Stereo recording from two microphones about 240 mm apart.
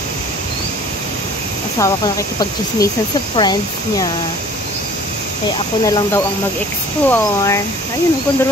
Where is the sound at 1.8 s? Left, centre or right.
Centre.